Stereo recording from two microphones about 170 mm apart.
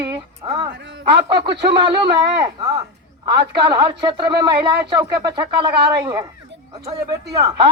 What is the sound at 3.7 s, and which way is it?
Speech, 30° right (ahead or behind).